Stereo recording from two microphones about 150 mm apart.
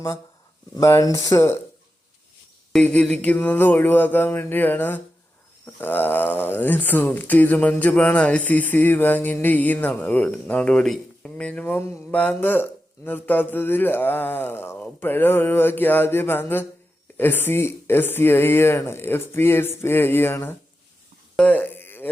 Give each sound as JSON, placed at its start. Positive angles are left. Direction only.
{"t": 0.8, "sound": "speech", "side_deg": 20}
{"t": 2.7, "sound": "speech", "side_deg": 5}
{"t": 21.3, "sound": "a sound", "side_deg": 10}